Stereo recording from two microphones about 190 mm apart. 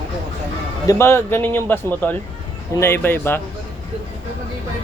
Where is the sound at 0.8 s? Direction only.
15° left (ahead or behind).